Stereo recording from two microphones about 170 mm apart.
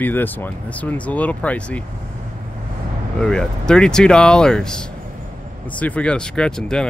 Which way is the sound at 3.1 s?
5° left (ahead or behind).